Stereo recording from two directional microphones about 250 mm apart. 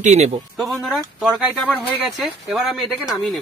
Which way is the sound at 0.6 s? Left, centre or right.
Centre.